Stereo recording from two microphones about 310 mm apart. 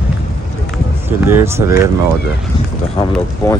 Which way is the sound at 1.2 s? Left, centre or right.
Centre.